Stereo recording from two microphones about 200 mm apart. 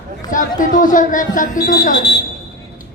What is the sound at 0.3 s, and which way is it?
Speech, 40° left (ahead or behind).